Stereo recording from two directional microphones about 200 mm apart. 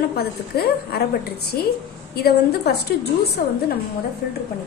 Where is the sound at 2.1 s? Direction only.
55° left (ahead or behind).